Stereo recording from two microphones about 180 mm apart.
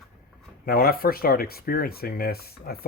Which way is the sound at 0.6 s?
55° left (ahead or behind).